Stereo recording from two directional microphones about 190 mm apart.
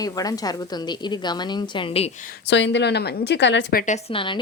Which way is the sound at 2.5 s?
70° left (ahead or behind).